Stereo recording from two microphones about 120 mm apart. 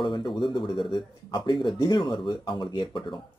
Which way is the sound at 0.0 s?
40° left (ahead or behind).